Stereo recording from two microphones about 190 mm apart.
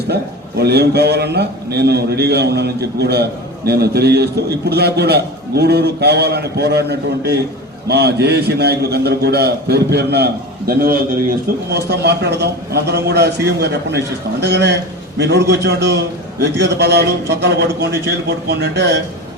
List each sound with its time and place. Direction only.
0.1 s a man's voice: 60° right (ahead or behind)
11.7 s a man's voice: 60° right (ahead or behind)